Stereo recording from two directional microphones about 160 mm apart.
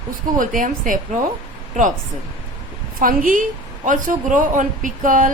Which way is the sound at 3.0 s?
60° right (ahead or behind).